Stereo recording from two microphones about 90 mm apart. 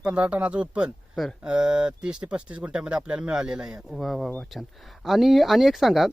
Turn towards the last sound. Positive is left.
turn(degrees=0)  # may be behind; listen again after turning